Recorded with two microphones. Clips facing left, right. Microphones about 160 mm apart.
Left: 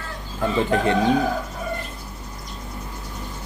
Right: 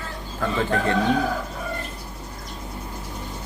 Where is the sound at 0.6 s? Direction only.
20° left (ahead or behind).